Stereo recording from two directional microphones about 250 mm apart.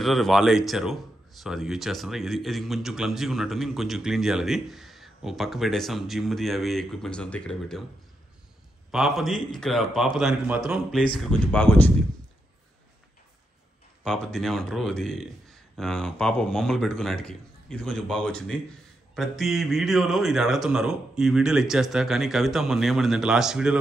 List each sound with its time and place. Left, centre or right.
0.0 s speech: centre
8.9 s speech: centre
14.0 s speech: centre